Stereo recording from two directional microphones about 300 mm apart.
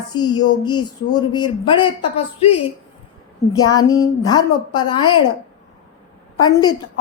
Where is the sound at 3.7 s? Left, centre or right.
Centre.